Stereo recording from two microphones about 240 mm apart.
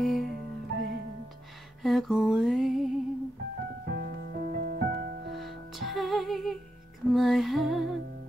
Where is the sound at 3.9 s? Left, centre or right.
Right.